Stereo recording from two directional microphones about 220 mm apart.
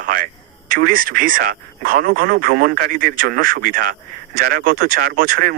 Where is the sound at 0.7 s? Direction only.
40° right (ahead or behind).